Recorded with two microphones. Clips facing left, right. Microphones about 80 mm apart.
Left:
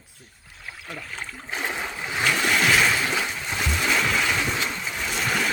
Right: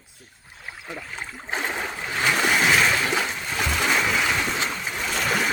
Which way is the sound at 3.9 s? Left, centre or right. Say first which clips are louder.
Left 1 dB; centre.